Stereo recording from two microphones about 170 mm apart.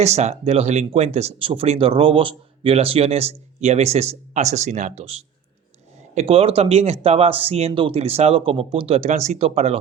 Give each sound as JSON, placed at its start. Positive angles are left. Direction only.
{"t": 0.0, "sound": "speech", "side_deg": -40}